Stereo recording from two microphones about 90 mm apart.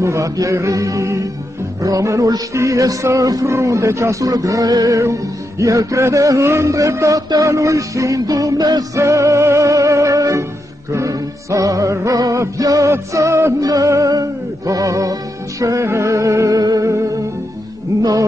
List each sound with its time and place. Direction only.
0.0 s music: 35° right (ahead or behind)
9.0 s music: 35° right (ahead or behind)